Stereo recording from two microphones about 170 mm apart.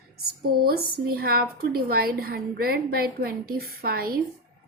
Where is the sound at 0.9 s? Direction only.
65° right (ahead or behind).